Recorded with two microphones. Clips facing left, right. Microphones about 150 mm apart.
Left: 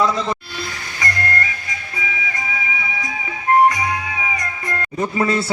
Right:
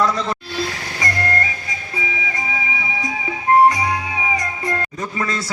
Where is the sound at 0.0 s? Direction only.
5° left (ahead or behind).